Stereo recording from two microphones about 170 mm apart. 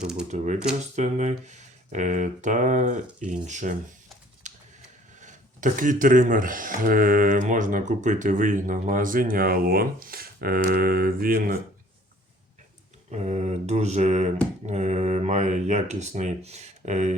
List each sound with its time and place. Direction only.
0.0 s speech: 5° right (ahead or behind)
0.9 s speech: 45° right (ahead or behind)
4.4 s a sound: 45° right (ahead or behind)
5.2 s speech: 50° right (ahead or behind)
13.1 s mantra: 40° right (ahead or behind)
14.7 s speech: 40° right (ahead or behind)